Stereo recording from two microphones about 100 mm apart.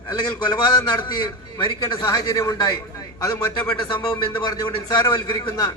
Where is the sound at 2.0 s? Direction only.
35° left (ahead or behind).